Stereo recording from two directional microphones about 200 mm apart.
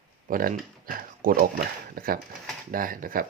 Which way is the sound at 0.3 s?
45° right (ahead or behind).